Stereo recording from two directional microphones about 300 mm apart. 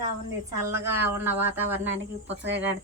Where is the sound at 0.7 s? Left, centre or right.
Centre.